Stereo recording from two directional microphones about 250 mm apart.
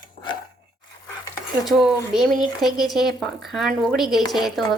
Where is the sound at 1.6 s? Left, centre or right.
Centre.